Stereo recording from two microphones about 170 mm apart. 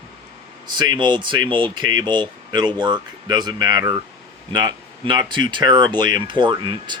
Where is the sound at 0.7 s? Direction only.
25° right (ahead or behind).